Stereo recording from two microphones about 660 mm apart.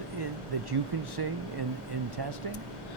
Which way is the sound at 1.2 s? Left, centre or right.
Right.